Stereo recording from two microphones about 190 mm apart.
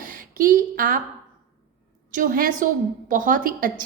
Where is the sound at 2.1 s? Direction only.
45° right (ahead or behind).